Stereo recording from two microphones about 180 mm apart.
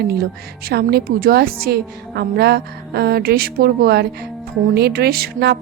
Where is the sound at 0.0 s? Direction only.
60° right (ahead or behind).